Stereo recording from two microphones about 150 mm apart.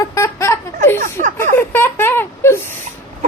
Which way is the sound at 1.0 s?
65° right (ahead or behind).